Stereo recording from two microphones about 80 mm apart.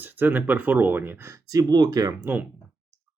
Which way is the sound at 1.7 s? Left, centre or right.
Right.